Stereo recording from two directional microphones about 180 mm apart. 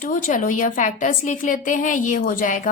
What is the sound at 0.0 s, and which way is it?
A woman's voice, 50° left (ahead or behind).